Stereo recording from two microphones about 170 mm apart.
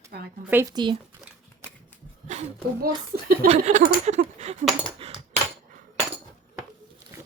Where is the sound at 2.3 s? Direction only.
45° right (ahead or behind).